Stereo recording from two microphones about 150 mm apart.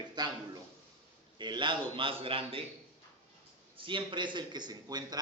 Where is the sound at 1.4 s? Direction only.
30° right (ahead or behind).